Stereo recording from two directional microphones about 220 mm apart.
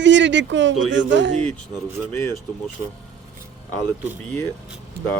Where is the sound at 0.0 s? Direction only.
55° right (ahead or behind).